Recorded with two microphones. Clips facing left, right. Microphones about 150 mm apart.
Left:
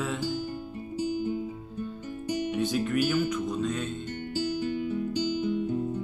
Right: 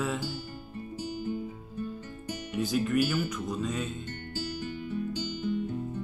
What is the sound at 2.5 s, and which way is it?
Music, centre (ahead or behind).